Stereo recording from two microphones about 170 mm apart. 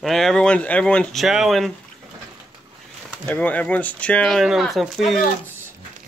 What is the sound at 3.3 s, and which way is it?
Speech, 10° left (ahead or behind).